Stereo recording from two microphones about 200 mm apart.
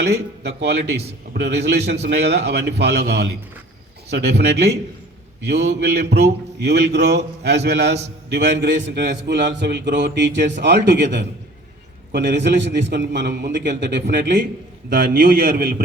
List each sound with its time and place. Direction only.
0.1 s a man's voice: 55° right (ahead or behind)
14.9 s a man's voice: 50° right (ahead or behind)